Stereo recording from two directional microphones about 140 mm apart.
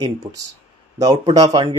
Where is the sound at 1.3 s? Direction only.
30° right (ahead or behind).